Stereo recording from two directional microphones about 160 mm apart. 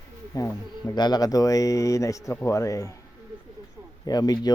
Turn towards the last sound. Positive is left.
turn(degrees=25)  # may be behind; listen again after turning